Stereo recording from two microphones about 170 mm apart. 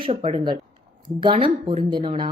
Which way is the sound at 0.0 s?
30° right (ahead or behind).